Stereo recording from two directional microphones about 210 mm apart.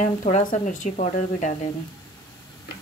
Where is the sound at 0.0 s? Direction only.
35° left (ahead or behind).